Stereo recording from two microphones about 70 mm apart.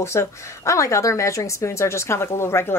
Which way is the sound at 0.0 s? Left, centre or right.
Left.